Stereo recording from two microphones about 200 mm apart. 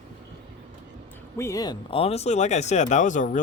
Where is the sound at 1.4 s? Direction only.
15° left (ahead or behind).